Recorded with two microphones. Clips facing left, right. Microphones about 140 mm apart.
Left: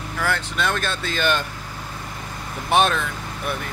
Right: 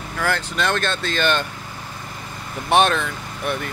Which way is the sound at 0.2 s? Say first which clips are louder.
Right 2 dB; centre (ahead or behind).